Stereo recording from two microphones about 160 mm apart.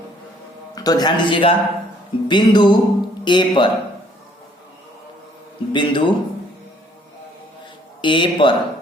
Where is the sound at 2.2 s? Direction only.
30° left (ahead or behind).